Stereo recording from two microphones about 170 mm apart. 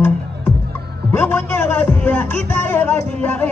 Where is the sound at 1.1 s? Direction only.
10° left (ahead or behind).